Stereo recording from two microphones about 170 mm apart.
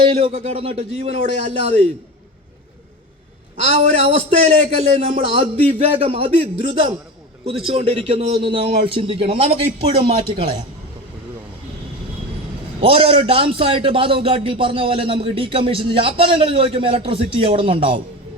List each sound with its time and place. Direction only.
0.0 s a man's voice: 35° right (ahead or behind)
3.7 s a man's voice: 40° right (ahead or behind)
12.8 s a man's voice: 35° right (ahead or behind)